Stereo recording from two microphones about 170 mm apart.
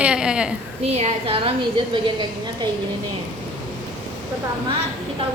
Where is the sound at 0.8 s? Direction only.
40° right (ahead or behind).